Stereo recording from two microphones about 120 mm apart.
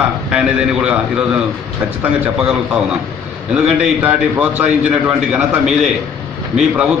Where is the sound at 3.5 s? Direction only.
10° right (ahead or behind).